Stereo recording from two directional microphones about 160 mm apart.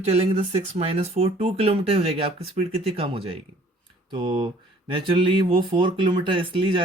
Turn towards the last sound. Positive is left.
turn(degrees=-35)  # may be behind; listen again after turning